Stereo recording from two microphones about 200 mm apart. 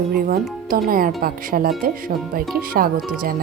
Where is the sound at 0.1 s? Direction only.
45° right (ahead or behind).